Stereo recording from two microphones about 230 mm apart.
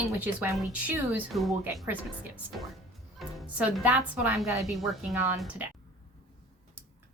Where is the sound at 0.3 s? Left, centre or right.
Centre.